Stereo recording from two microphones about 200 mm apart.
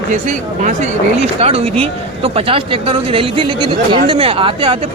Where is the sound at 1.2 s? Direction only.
30° right (ahead or behind).